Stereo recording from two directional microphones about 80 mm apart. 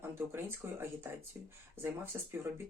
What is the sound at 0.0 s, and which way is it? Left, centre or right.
Speech, right.